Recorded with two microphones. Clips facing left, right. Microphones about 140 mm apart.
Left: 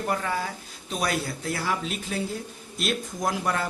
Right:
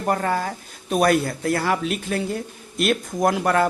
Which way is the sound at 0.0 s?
50° right (ahead or behind).